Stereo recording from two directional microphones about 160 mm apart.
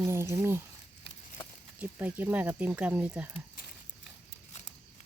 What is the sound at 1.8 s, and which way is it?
Speech, 10° right (ahead or behind).